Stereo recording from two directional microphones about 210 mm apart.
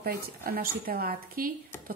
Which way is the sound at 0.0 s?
45° right (ahead or behind).